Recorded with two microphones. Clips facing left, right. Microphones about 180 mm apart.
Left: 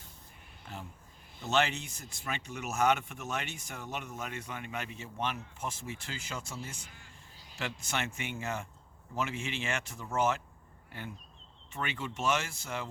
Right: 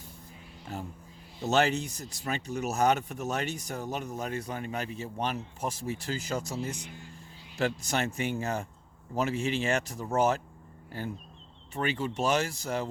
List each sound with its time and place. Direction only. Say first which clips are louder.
0.7 s speech: right 7 dB; 40° right (ahead or behind)